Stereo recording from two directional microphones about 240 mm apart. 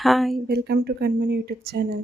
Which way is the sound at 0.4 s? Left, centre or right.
Right.